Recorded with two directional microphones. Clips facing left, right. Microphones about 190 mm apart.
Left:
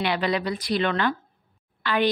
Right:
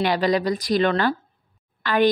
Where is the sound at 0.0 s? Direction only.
40° right (ahead or behind).